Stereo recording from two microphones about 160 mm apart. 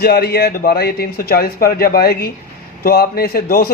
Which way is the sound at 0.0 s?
75° left (ahead or behind).